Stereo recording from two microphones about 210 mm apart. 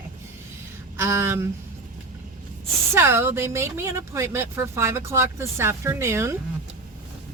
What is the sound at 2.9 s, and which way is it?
Speech, 10° right (ahead or behind).